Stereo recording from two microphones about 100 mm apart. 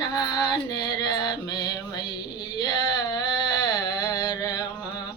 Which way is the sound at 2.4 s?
45° left (ahead or behind).